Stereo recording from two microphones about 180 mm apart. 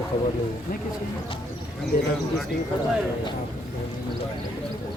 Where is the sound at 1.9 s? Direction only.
50° left (ahead or behind).